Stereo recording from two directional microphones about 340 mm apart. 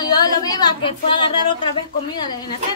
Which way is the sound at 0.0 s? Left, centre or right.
Centre.